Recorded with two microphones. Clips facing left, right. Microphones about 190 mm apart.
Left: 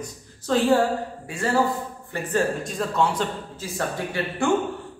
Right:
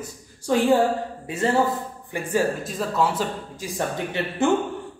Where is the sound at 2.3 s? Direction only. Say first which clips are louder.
Right 1 dB; 5° right (ahead or behind).